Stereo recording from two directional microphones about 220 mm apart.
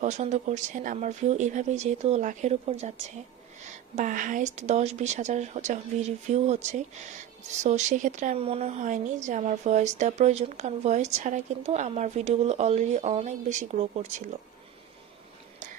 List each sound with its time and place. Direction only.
0.0 s a woman's voice: 30° right (ahead or behind)